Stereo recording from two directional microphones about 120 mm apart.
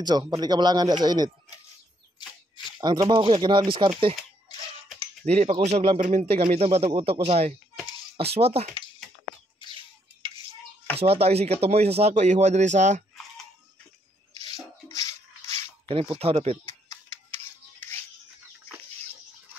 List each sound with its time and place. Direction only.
0.4 s speech: 35° right (ahead or behind)
2.8 s speech: 35° right (ahead or behind)
5.3 s speech: 70° right (ahead or behind)
5.9 s speech: 90° right
6.2 s speech: 55° right (ahead or behind)
11.0 s speech: 55° right (ahead or behind); by 13.0 s 80° right
14.4 s rub: 30° left (ahead or behind)
16.2 s speech: 55° right (ahead or behind)
17.7 s music: 20° left (ahead or behind)